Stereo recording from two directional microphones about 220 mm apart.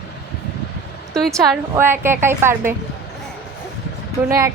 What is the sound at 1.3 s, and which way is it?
Speech, 10° right (ahead or behind).